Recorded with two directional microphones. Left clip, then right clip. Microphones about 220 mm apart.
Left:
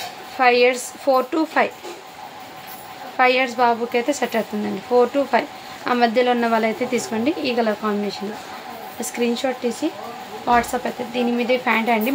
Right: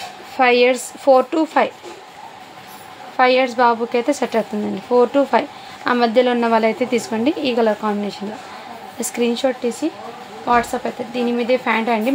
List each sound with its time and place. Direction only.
0.4 s a woman's voice: 25° right (ahead or behind)
3.2 s a woman's voice: 20° right (ahead or behind)